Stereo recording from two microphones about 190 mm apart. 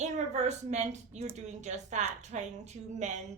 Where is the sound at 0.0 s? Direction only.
35° right (ahead or behind).